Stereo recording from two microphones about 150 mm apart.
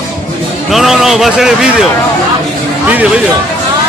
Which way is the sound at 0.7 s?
Centre (ahead or behind).